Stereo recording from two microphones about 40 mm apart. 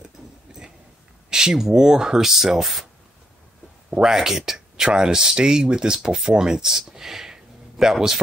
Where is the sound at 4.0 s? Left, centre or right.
Centre.